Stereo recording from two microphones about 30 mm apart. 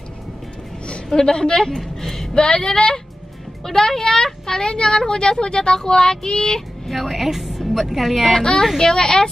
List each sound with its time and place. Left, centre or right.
1.1 s speech: left
2.0 s a sound: centre
2.3 s speech: left
4.7 s speech: left
6.9 s speech: centre
7.2 s music: centre
7.9 s speech: centre
8.7 s speech: left